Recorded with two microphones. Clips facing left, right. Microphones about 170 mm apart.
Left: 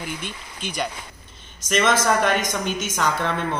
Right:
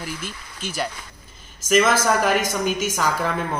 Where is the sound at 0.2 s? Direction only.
5° right (ahead or behind).